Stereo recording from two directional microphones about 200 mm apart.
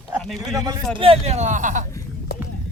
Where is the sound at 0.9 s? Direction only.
30° right (ahead or behind).